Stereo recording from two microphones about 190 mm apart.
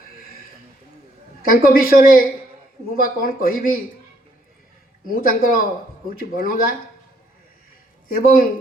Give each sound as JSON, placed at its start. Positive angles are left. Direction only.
{"t": 1.4, "sound": "speech", "side_deg": 50}
{"t": 5.1, "sound": "speech", "side_deg": 50}
{"t": 8.1, "sound": "speech", "side_deg": 50}